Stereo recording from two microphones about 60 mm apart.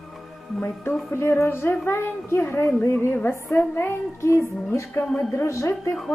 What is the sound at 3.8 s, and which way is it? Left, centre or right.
Music, left.